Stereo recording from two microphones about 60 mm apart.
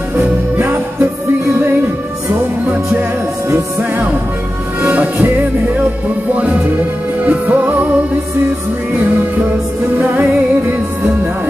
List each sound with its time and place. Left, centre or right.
3.0 s music: right
4.8 s music: right
8.9 s music: right